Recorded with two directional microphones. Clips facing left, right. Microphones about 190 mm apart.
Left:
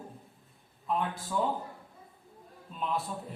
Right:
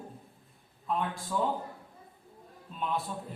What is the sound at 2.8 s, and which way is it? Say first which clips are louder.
Speech: even; centre (ahead or behind).